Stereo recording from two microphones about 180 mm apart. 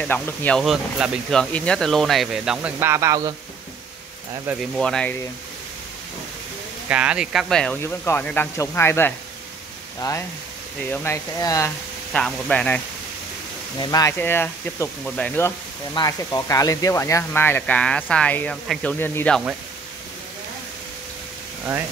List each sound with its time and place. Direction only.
0.0 s speech: 10° left (ahead or behind); by 3.3 s 20° right (ahead or behind)
4.5 s speech: centre (ahead or behind)
6.9 s speech: 5° right (ahead or behind); by 11.7 s 15° left (ahead or behind)
12.1 s speech: 5° left (ahead or behind)
13.7 s speech: 20° left (ahead or behind)
15.9 s speech: 20° left (ahead or behind)